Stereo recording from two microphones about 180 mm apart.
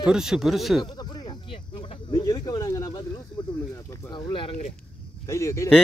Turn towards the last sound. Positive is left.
turn(degrees=15)  # may be behind; listen again after turning